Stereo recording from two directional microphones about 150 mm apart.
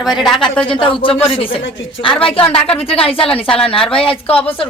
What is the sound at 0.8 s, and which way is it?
Speech, 35° left (ahead or behind).